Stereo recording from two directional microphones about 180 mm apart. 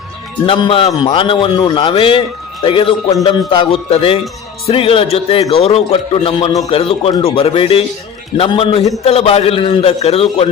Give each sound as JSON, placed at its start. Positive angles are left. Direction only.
{"t": 0.4, "sound": "a man's voice", "side_deg": 30}